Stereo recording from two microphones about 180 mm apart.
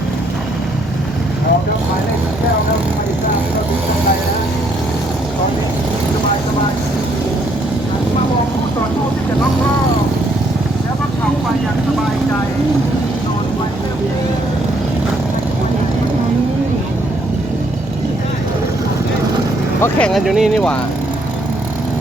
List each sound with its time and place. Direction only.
19.8 s speech: 5° left (ahead or behind)